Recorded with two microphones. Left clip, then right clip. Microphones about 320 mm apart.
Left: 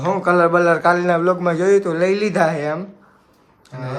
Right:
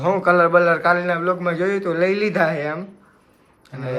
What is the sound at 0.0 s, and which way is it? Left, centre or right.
A man's voice, centre.